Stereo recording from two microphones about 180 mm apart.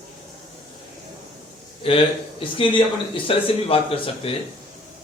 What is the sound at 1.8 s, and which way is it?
A man's voice, 30° left (ahead or behind).